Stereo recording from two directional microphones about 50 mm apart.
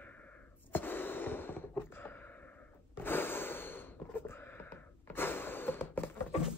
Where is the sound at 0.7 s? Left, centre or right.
Left.